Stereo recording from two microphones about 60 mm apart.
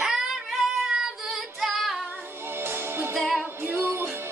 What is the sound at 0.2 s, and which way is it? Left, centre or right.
Child singing, centre.